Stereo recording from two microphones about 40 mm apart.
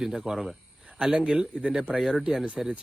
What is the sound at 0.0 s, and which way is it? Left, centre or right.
Speech, centre.